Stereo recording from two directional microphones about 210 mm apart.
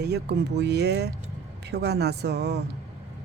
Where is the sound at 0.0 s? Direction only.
50° right (ahead or behind).